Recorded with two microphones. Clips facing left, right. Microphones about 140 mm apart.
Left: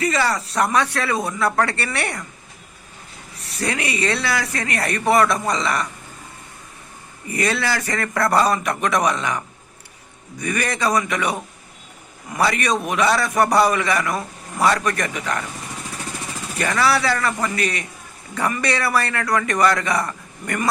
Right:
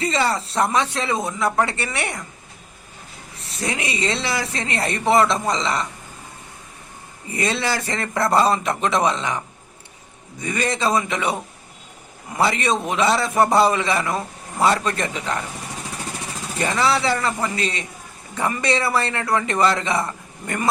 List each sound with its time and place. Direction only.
0.0 s a man's voice: 25° right (ahead or behind)
3.4 s a man's voice: 20° right (ahead or behind)
7.3 s a man's voice: 25° right (ahead or behind)
10.4 s a man's voice: 20° right (ahead or behind)
16.6 s a man's voice: 20° right (ahead or behind)